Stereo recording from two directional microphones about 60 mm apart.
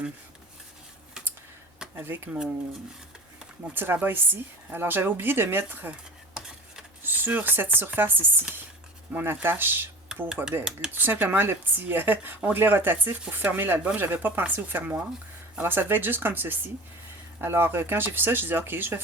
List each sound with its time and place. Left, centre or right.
2.0 s a woman's voice: right
3.8 s a woman's voice: right
5.9 s a sound: centre
7.0 s a woman's voice: right
10.6 s speech: centre
10.9 s a woman's voice: right